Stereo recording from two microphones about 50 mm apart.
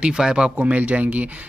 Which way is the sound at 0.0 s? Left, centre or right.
Centre.